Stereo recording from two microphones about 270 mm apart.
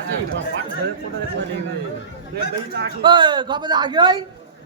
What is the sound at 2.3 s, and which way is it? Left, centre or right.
Speech, right.